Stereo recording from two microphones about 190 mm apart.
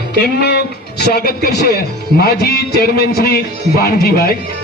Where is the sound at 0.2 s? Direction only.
55° left (ahead or behind).